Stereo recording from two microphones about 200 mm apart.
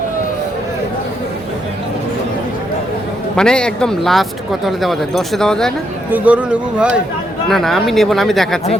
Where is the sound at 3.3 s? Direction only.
5° left (ahead or behind).